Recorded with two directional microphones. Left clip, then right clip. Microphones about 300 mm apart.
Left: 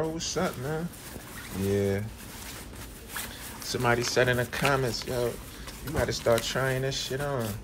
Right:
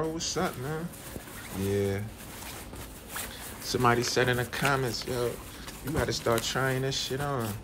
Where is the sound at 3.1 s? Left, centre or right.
Centre.